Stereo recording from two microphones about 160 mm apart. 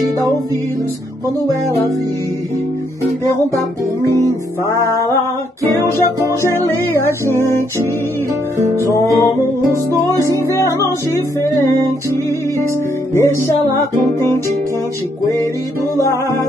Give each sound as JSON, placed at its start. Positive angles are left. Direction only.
{"t": 4.6, "sound": "music", "side_deg": 20}
{"t": 5.7, "sound": "music", "side_deg": -20}
{"t": 6.4, "sound": "music", "side_deg": 15}
{"t": 8.9, "sound": "music", "side_deg": 20}
{"t": 13.1, "sound": "music", "side_deg": 15}